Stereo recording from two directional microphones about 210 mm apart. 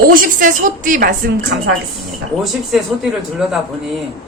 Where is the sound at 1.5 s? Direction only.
55° right (ahead or behind).